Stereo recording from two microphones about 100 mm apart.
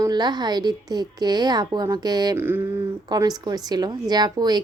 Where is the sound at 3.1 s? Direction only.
40° right (ahead or behind).